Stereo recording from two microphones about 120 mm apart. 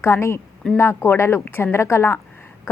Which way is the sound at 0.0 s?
20° left (ahead or behind).